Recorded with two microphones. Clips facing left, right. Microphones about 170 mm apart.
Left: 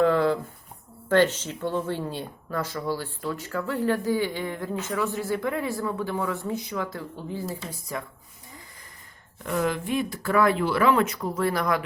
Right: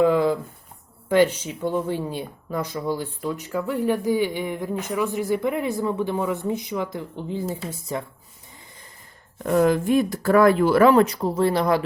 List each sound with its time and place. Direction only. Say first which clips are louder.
0.0 s a sound: right 2 dB; 15° right (ahead or behind)
1.0 s speech: right 2 dB; 10° right (ahead or behind)
9.4 s speech: right 8 dB; 40° right (ahead or behind)